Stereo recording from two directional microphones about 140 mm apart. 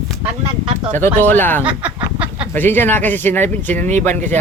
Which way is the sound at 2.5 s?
15° left (ahead or behind).